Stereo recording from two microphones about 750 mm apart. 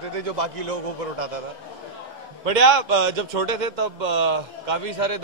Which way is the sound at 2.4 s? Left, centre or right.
Right.